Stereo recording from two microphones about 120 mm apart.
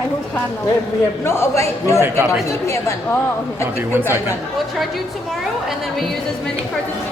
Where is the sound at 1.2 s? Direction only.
20° left (ahead or behind).